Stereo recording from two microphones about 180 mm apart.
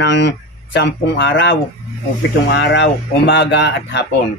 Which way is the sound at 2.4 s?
75° left (ahead or behind).